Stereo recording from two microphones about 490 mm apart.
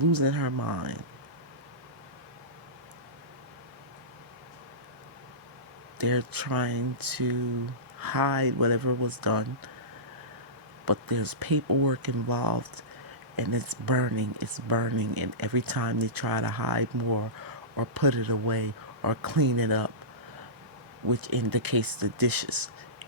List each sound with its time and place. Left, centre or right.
0.0 s speech: right
6.0 s speech: right
10.8 s speech: right
21.1 s speech: right